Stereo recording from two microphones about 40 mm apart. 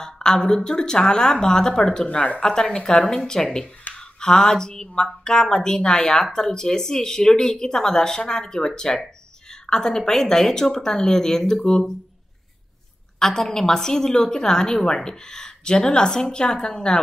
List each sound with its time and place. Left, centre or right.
0.0 s speech: centre
2.0 s speech: left
2.4 s speech: centre
13.2 s speech: centre